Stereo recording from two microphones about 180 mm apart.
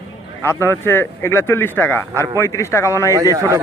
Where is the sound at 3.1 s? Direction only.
20° right (ahead or behind).